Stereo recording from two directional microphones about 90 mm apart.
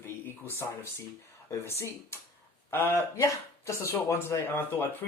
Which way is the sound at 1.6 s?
30° left (ahead or behind).